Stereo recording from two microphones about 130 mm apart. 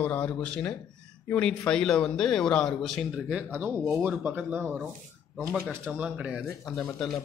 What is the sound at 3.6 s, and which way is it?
Speech, 15° right (ahead or behind).